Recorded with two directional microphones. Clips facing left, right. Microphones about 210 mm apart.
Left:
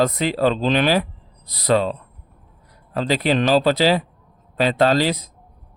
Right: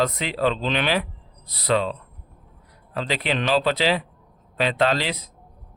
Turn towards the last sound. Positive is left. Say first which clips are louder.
# left 5 dB
turn(degrees=40)  # may be behind; listen again after turning